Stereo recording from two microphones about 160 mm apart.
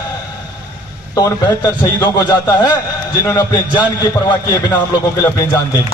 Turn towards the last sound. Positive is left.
turn(degrees=20)  # may be behind; listen again after turning